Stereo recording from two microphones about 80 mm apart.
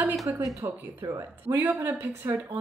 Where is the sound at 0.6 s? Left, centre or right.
Right.